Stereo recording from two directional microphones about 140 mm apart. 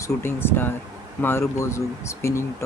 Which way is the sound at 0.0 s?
15° left (ahead or behind).